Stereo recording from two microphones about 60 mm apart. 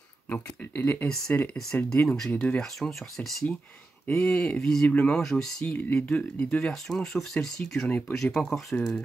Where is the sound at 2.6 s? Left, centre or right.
Centre; by 5.2 s left.